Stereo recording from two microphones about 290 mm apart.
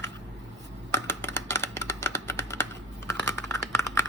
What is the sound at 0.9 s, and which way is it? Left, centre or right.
Computer keyboard, centre.